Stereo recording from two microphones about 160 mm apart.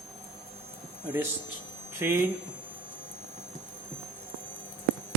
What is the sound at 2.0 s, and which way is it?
Speech, 15° right (ahead or behind).